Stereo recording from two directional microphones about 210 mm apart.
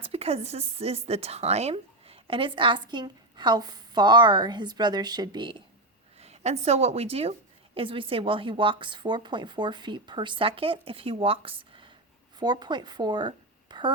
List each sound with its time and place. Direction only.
0.0 s a woman's voice: 30° right (ahead or behind)